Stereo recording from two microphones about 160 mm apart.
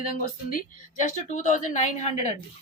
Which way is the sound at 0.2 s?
50° left (ahead or behind).